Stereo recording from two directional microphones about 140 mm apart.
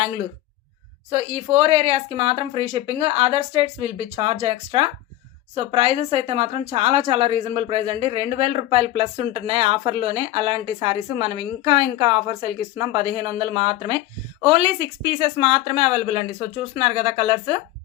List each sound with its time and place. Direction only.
1.1 s speech: 45° right (ahead or behind)